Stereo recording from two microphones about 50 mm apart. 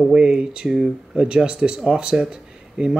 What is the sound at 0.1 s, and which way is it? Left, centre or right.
Speech, centre.